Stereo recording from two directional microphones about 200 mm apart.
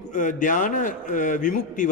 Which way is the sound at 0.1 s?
40° left (ahead or behind).